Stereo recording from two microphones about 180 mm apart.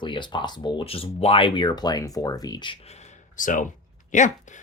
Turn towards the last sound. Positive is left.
turn(degrees=45)  # may be behind; listen again after turning